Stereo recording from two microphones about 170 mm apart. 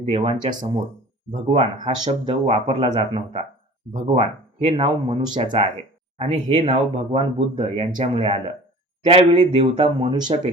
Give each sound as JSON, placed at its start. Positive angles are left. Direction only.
{"t": 0.1, "sound": "speech", "side_deg": -35}